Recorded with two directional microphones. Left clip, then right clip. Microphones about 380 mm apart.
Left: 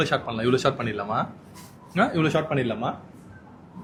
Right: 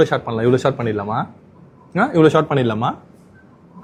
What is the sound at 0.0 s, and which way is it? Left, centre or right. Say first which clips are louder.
Speech: right 8 dB; centre.